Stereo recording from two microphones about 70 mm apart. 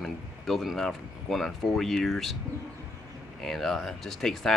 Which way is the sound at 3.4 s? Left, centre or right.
Centre.